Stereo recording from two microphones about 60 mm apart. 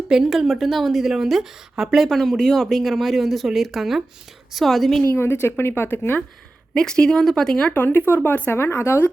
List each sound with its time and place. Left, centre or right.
0.1 s a woman's voice: centre
5.1 s speech: left
6.7 s speech: centre
7.7 s speech: left